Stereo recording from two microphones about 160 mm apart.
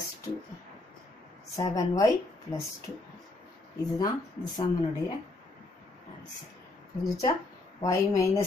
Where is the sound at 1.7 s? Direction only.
20° left (ahead or behind).